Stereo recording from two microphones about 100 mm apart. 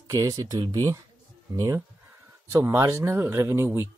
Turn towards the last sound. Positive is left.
turn(degrees=-25)  # may be behind; listen again after turning